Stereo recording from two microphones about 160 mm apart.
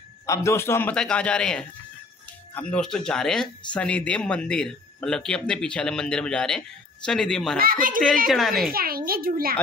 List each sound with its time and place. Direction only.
0.3 s a man's voice: 20° left (ahead or behind)
7.5 s a child's voice: 65° right (ahead or behind)
8.3 s speech: centre (ahead or behind)
8.7 s a child's voice: 65° right (ahead or behind)